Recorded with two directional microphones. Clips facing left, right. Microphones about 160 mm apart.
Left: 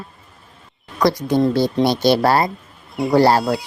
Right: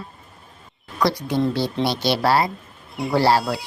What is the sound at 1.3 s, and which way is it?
A woman's voice, 45° left (ahead or behind).